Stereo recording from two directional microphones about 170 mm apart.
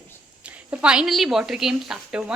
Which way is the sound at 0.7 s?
5° right (ahead or behind).